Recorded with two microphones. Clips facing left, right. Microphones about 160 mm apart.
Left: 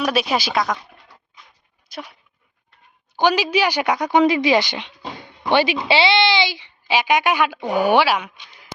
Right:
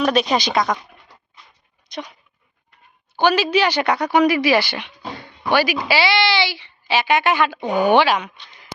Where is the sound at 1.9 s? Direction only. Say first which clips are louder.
Right 3 dB; 5° left (ahead or behind).